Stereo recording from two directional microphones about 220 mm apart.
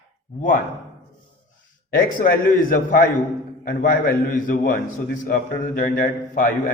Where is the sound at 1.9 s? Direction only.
40° left (ahead or behind).